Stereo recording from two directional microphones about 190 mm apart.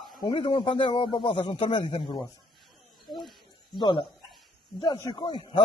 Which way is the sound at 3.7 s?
25° left (ahead or behind).